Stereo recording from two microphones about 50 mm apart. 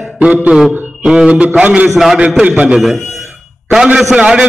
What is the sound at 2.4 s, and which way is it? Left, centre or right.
A man's voice, right.